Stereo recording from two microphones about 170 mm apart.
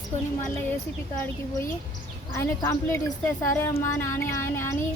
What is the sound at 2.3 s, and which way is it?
A woman's voice, 15° left (ahead or behind).